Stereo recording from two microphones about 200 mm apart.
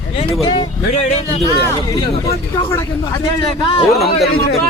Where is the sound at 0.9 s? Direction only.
35° left (ahead or behind).